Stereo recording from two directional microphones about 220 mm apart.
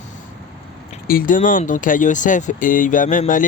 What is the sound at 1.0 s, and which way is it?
Speech, 40° left (ahead or behind).